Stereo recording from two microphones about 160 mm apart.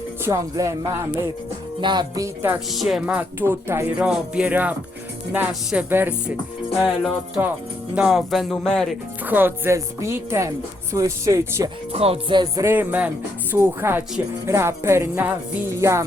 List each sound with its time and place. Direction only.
0.3 s speech: 20° right (ahead or behind)
2.7 s speech: centre (ahead or behind)
6.8 s speech: centre (ahead or behind)
9.2 s speech: 10° right (ahead or behind)
11.9 s music: 40° right (ahead or behind)
12.6 s speech: 10° right (ahead or behind)